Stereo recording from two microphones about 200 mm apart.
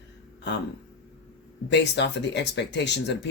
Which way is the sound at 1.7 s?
60° left (ahead or behind).